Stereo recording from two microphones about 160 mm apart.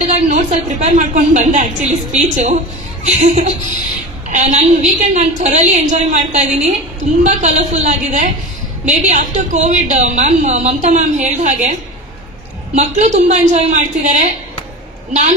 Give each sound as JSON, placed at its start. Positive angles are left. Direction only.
{"t": 0.0, "sound": "a woman's voice", "side_deg": -45}
{"t": 12.7, "sound": "a woman's voice", "side_deg": -45}